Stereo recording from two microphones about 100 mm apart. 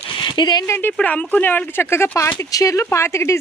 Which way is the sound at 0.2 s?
50° left (ahead or behind).